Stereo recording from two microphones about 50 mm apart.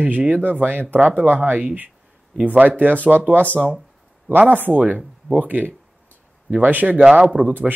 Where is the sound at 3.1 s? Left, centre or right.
Right.